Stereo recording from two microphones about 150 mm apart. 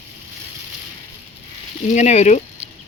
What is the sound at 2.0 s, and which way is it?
Speech, 50° left (ahead or behind).